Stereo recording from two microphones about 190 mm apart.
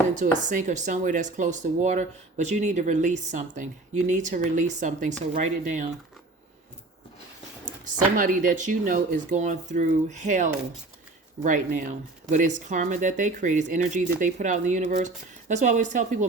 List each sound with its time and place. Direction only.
0.2 s speech: 40° right (ahead or behind)
8.1 s speech: 45° right (ahead or behind)